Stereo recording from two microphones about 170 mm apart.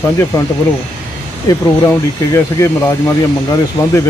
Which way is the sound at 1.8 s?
20° left (ahead or behind).